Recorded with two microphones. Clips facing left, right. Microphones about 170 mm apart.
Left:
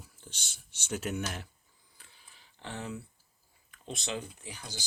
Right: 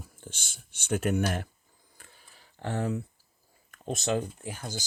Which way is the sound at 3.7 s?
45° right (ahead or behind).